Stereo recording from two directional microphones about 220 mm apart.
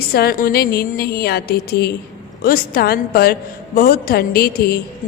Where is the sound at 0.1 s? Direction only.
45° left (ahead or behind).